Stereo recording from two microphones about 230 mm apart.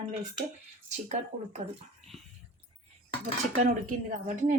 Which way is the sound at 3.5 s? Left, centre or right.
Right.